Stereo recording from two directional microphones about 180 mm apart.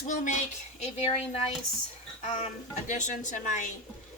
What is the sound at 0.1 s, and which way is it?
Speech, 45° left (ahead or behind).